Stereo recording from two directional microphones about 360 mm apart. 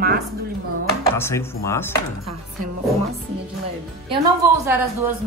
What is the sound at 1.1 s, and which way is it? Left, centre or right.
Speech, centre.